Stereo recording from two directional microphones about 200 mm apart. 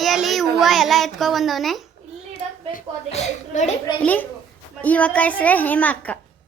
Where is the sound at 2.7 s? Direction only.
35° left (ahead or behind).